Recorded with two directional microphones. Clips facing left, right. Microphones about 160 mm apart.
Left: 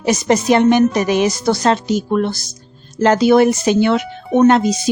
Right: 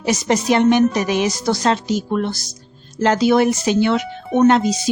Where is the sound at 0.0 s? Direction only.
50° left (ahead or behind).